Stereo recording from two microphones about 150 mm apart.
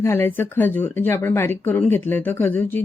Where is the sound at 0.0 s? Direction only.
15° left (ahead or behind).